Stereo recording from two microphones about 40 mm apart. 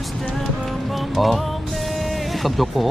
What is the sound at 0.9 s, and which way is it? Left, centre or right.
Music, centre.